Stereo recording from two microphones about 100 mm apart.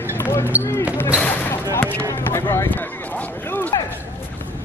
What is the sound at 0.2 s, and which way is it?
Basketball bounce, 25° left (ahead or behind).